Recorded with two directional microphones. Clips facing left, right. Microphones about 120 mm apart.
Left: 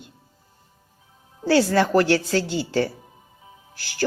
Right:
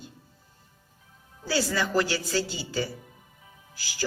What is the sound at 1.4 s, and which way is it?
A woman's voice, 70° left (ahead or behind).